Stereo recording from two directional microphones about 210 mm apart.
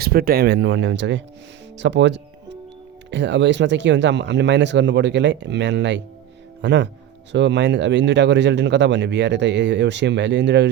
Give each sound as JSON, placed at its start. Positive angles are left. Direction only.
{"t": 0.0, "sound": "speech", "side_deg": -45}